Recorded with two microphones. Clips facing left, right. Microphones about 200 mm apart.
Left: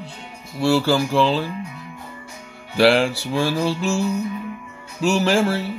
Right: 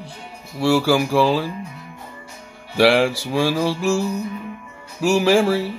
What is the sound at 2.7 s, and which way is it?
Music, 5° right (ahead or behind).